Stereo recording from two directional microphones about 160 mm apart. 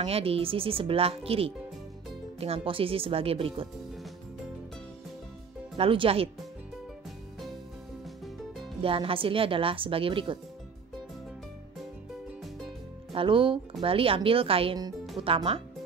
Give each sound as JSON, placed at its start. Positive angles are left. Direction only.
{"t": 0.0, "sound": "speech", "side_deg": -35}
{"t": 5.8, "sound": "speech", "side_deg": -35}
{"t": 8.8, "sound": "speech", "side_deg": -35}
{"t": 13.1, "sound": "speech", "side_deg": -35}